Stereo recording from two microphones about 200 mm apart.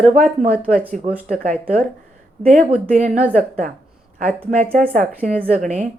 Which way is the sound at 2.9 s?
35° right (ahead or behind).